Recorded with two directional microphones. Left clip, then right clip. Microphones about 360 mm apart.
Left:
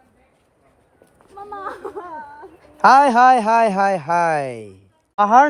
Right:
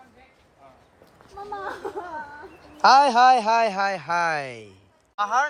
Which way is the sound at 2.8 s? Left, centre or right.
Left.